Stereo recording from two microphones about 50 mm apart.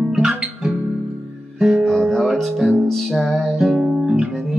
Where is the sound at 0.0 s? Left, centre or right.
Centre.